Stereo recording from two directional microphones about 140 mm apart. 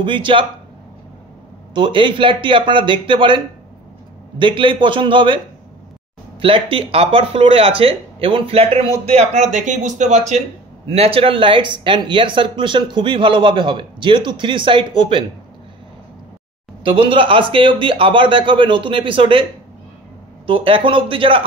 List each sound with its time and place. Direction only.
0.0 s speech: 35° right (ahead or behind)
1.7 s speech: 35° right (ahead or behind)
6.4 s speech: 40° right (ahead or behind); by 10.4 s 55° right (ahead or behind)
11.0 s speech: 40° right (ahead or behind)
16.8 s speech: 40° right (ahead or behind)
20.4 s speech: 40° right (ahead or behind)